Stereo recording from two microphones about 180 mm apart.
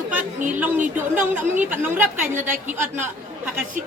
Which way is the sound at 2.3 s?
45° right (ahead or behind).